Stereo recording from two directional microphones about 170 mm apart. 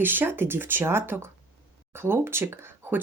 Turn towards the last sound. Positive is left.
turn(degrees=-15)  # may be behind; listen again after turning